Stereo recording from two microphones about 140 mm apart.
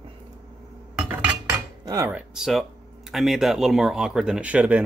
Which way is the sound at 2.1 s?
5° right (ahead or behind).